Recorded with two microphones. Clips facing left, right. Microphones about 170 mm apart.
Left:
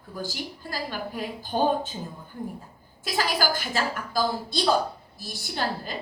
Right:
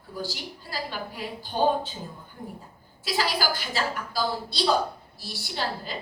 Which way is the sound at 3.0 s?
50° left (ahead or behind).